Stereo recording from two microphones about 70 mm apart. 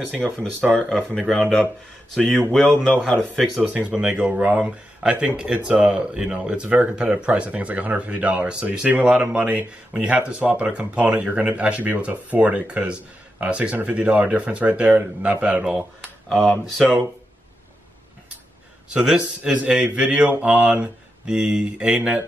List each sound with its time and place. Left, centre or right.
0.4 s speech: centre
3.1 s speech: centre
3.9 s speech: centre
16.3 s speech: centre
19.0 s speech: centre